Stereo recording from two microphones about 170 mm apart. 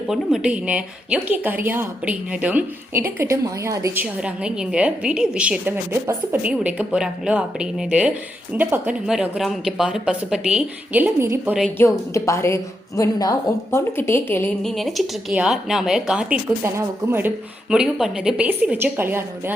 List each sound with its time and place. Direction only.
0.1 s a woman's voice: 5° right (ahead or behind)
11.8 s a woman's voice: 15° left (ahead or behind)
14.6 s a woman's voice: centre (ahead or behind)